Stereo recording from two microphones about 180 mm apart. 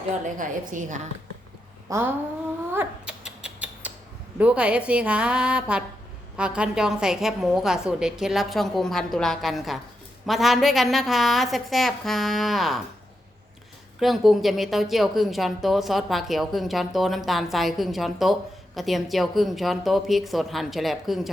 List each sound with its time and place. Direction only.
0.3 s a woman's voice: 45° right (ahead or behind)
1.9 s a woman's voice: 15° right (ahead or behind)
2.7 s rodents: 5° right (ahead or behind)
4.4 s a woman's voice: 5° right (ahead or behind)
14.0 s a woman's voice: centre (ahead or behind)